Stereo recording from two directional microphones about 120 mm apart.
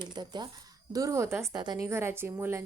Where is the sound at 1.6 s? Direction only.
35° right (ahead or behind).